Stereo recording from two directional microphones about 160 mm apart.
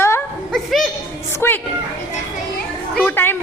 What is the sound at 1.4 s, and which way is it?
Speech, 15° left (ahead or behind).